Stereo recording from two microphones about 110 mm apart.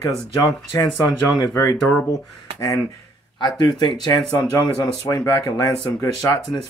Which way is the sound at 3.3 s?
45° left (ahead or behind).